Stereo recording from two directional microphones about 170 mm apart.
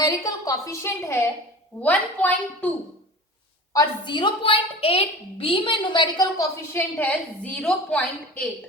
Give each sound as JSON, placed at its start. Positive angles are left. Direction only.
{"t": 0.0, "sound": "a woman's voice", "side_deg": 20}
{"t": 3.7, "sound": "a woman's voice", "side_deg": 25}
{"t": 6.7, "sound": "a woman's voice", "side_deg": 10}